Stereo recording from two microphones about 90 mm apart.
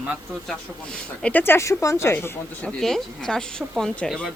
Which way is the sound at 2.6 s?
10° left (ahead or behind).